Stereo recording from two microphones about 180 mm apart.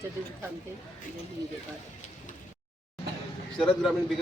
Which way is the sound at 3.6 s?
5° left (ahead or behind).